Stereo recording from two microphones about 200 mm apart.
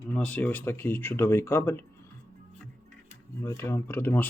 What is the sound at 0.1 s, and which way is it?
Speech, 5° left (ahead or behind).